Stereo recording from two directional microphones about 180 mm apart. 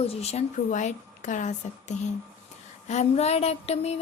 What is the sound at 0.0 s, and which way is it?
Speech, 35° left (ahead or behind).